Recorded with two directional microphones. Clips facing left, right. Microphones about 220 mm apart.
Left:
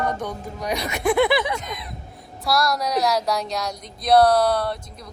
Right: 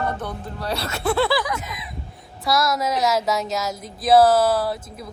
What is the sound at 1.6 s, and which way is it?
Speech, 5° right (ahead or behind).